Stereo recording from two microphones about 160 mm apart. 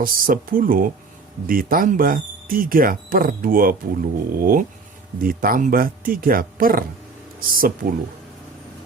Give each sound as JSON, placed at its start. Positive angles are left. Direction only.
{"t": 0.0, "sound": "speech", "side_deg": -60}